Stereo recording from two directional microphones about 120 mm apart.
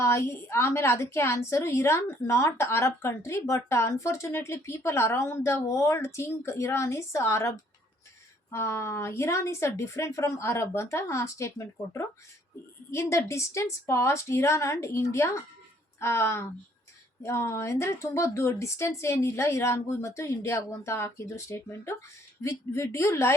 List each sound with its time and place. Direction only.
0.0 s a woman's voice: 20° left (ahead or behind)